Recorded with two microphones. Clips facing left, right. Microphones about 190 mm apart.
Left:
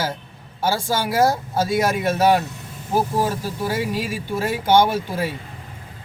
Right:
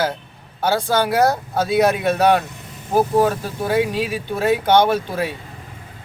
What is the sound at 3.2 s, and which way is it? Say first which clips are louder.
Speech: right 5 dB; 55° right (ahead or behind).